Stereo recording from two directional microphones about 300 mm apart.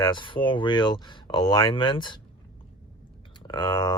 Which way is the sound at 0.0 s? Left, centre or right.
Centre.